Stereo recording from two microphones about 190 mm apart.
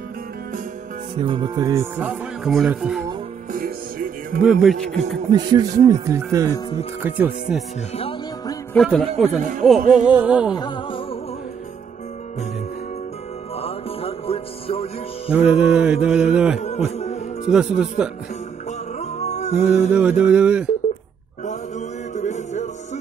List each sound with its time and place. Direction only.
1.1 s speech: 25° right (ahead or behind); by 3.0 s 5° right (ahead or behind)
3.5 s music: 50° right (ahead or behind)
4.4 s speech: 5° right (ahead or behind)
5.3 s speech: 20° right (ahead or behind)
8.7 s speech: centre (ahead or behind)
10.5 s music: 25° left (ahead or behind)
13.6 s music: 30° left (ahead or behind)
15.3 s speech: 5° right (ahead or behind)
16.5 s music: 35° left (ahead or behind)
17.5 s speech: 5° right (ahead or behind)
18.9 s music: 35° left (ahead or behind)
19.9 s speech: 5° right (ahead or behind)
21.5 s chant: 40° left (ahead or behind)